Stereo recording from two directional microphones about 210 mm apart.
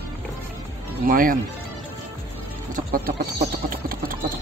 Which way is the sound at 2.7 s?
45° right (ahead or behind).